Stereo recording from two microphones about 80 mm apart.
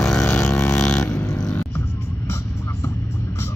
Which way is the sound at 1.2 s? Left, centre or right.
Left.